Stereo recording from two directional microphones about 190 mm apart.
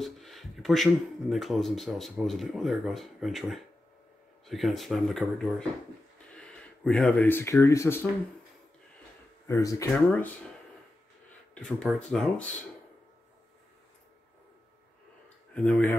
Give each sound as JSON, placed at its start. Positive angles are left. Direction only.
{"t": 0.0, "sound": "speech", "side_deg": 0}
{"t": 9.5, "sound": "speech", "side_deg": 15}
{"t": 11.5, "sound": "speech", "side_deg": 5}
{"t": 15.5, "sound": "speech", "side_deg": 5}